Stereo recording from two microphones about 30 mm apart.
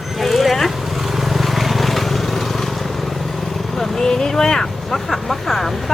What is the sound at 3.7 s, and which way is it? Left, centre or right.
Speech, centre.